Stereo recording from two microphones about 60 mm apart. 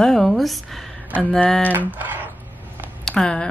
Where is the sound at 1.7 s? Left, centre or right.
Right.